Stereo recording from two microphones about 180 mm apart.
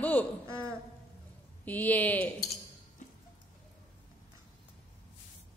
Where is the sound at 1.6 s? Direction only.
10° left (ahead or behind).